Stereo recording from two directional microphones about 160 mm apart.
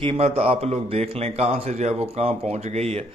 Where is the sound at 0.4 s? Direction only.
40° right (ahead or behind).